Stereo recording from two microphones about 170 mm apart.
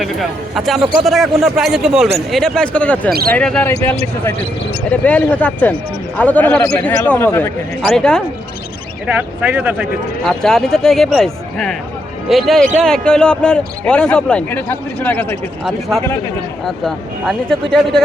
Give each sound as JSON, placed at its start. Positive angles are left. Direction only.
{"t": 0.0, "sound": "speech", "side_deg": 0}
{"t": 3.1, "sound": "speech", "side_deg": -65}
{"t": 3.3, "sound": "speech", "side_deg": 5}
{"t": 9.0, "sound": "speech", "side_deg": -10}
{"t": 10.2, "sound": "speech", "side_deg": 0}
{"t": 16.6, "sound": "speech", "side_deg": 0}